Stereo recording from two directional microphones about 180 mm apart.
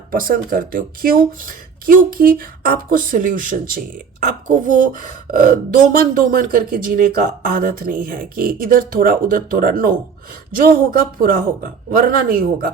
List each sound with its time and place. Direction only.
0.1 s speech: 50° right (ahead or behind)